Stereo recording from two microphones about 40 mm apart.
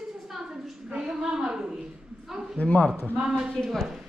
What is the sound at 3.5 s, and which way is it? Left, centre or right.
Speech, centre.